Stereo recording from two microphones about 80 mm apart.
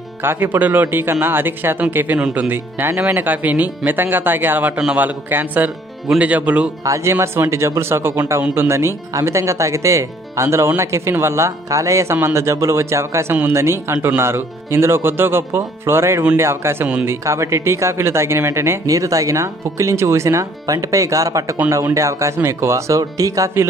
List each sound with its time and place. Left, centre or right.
0.2 s speech: right
6.8 s speech: right